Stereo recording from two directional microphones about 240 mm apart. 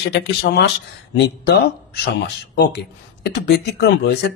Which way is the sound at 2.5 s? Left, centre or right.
Left.